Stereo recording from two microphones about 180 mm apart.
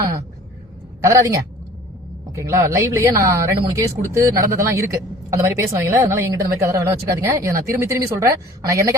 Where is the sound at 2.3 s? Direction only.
15° right (ahead or behind).